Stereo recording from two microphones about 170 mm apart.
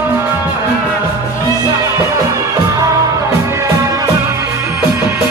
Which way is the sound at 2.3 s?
20° right (ahead or behind).